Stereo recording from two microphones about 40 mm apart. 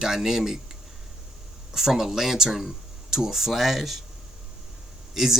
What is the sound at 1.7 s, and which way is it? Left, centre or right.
Speech, centre.